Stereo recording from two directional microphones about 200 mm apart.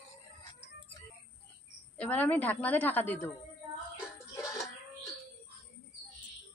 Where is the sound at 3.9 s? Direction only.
5° right (ahead or behind).